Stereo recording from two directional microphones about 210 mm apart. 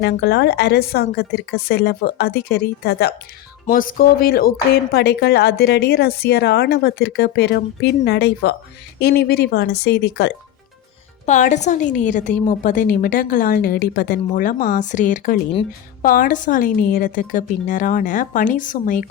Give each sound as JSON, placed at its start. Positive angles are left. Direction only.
{"t": 0.0, "sound": "a woman's voice", "side_deg": 50}
{"t": 11.3, "sound": "a woman's voice", "side_deg": 35}